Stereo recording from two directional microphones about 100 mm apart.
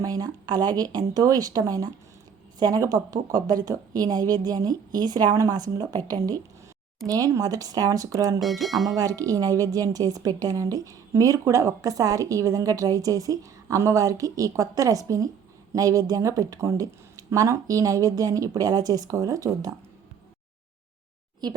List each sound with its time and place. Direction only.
0.0 s a woman's voice: 40° right (ahead or behind)
7.1 s a woman's voice: 35° right (ahead or behind)
8.4 s speech: centre (ahead or behind)
9.0 s a woman's voice: 35° right (ahead or behind)